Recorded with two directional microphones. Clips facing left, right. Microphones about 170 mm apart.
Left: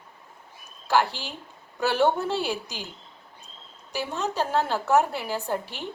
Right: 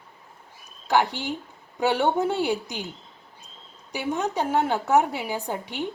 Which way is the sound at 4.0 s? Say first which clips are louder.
Right 2 dB; 15° right (ahead or behind).